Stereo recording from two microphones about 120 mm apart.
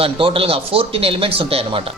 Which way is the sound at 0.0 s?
50° right (ahead or behind).